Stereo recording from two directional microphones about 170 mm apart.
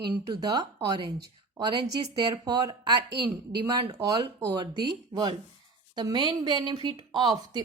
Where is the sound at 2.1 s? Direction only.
25° right (ahead or behind).